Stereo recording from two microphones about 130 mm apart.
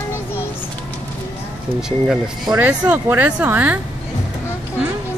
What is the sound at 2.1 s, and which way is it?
Speech, 5° right (ahead or behind).